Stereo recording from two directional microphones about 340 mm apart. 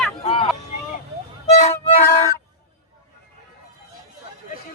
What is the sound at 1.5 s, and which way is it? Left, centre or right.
Music, centre.